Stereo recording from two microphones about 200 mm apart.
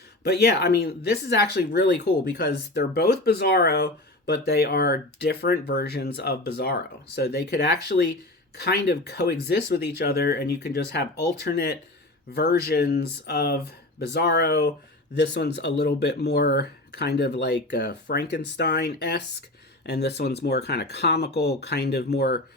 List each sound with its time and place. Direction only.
0.2 s speech: 55° left (ahead or behind)